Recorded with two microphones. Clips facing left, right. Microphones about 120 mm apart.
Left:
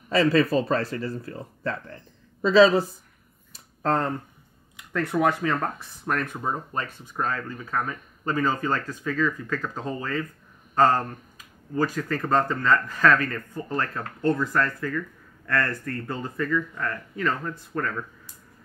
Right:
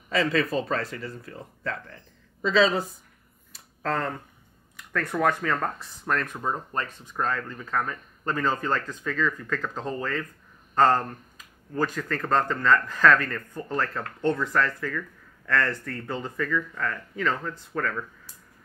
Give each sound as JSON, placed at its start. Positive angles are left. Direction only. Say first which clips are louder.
{"t": 0.1, "sound": "speech", "louder": "left 4 dB", "side_deg": 35}
{"t": 3.8, "sound": "speech", "louder": "left 4 dB", "side_deg": 20}
{"t": 4.9, "sound": "speech", "louder": "left 2 dB", "side_deg": 10}